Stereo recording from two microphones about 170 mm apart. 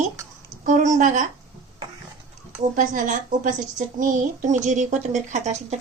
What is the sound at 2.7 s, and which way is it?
Speech, 50° right (ahead or behind).